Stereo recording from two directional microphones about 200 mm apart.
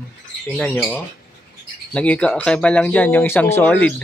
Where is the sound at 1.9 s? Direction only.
5° left (ahead or behind).